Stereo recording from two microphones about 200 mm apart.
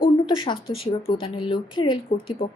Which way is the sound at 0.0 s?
25° left (ahead or behind).